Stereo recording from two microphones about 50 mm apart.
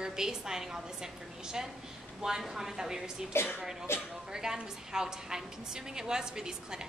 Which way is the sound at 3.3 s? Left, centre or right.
Left.